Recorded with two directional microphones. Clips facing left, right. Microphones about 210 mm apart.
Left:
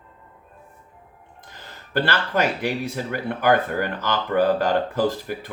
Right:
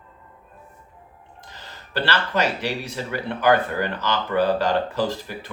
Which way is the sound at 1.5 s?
50° left (ahead or behind).